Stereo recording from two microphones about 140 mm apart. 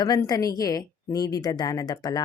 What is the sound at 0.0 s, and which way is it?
Speech, 25° left (ahead or behind).